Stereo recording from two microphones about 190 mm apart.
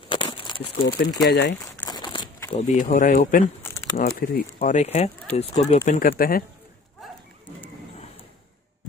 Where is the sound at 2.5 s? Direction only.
40° left (ahead or behind).